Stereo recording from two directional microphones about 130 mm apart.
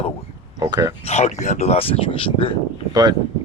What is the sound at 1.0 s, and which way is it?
Speech, 55° left (ahead or behind).